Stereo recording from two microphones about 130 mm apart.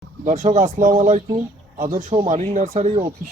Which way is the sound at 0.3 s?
65° right (ahead or behind).